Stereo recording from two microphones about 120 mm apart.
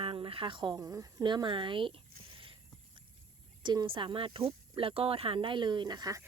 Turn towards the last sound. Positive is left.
turn(degrees=-35)  # may be behind; listen again after turning